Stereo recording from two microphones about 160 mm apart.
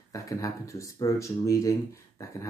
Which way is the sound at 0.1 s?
20° left (ahead or behind).